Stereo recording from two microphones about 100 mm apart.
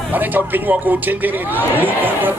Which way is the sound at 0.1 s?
20° right (ahead or behind).